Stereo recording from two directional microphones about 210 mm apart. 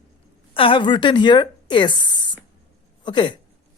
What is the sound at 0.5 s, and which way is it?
A woman's voice, 25° left (ahead or behind).